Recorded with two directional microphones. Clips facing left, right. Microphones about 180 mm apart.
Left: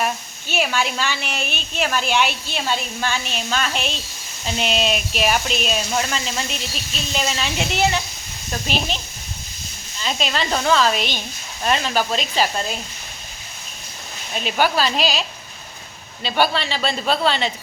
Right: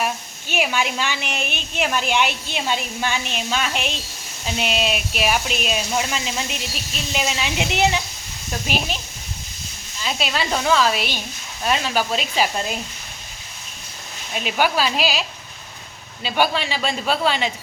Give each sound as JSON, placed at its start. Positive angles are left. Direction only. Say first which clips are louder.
{"t": 0.0, "sound": "a woman's voice", "louder": "left 1 dB", "side_deg": -15}
{"t": 10.0, "sound": "a woman's voice", "louder": "left 1 dB", "side_deg": -5}
{"t": 14.3, "sound": "a woman's voice", "louder": "left 1 dB", "side_deg": -10}